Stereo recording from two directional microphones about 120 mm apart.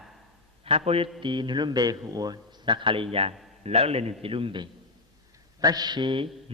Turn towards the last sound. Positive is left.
turn(degrees=-40)  # may be behind; listen again after turning